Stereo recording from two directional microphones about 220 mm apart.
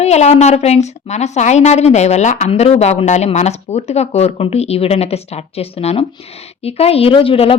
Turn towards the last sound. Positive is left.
turn(degrees=25)  # may be behind; listen again after turning